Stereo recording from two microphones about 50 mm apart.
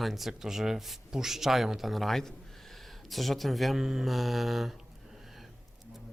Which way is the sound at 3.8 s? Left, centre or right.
Centre.